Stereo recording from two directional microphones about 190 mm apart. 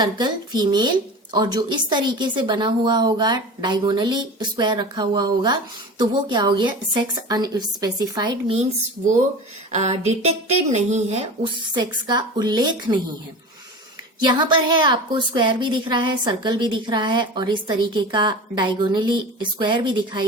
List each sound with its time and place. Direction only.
0.0 s a woman's voice: 20° right (ahead or behind)
9.7 s a woman's voice: 35° right (ahead or behind)
14.2 s a woman's voice: 25° right (ahead or behind)